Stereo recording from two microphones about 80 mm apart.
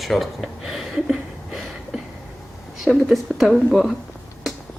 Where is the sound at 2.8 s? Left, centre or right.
Centre.